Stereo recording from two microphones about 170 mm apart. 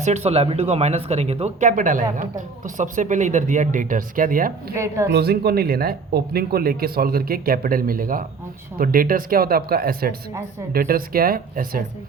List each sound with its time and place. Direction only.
0.0 s speech: 40° right (ahead or behind)
4.7 s a woman's voice: 15° right (ahead or behind)
5.1 s speech: 70° right (ahead or behind)